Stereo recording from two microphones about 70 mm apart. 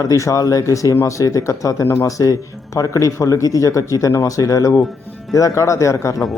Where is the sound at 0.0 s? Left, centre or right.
Left.